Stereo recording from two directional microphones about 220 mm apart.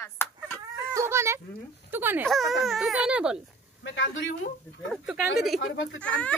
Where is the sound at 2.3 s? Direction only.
Centre (ahead or behind).